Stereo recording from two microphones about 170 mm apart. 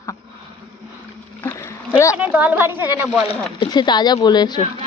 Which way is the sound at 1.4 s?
10° left (ahead or behind).